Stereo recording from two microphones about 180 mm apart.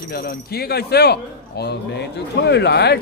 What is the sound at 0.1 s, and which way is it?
Speech, 60° left (ahead or behind).